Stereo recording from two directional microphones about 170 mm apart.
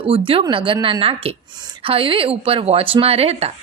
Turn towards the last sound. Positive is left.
turn(degrees=-35)  # may be behind; listen again after turning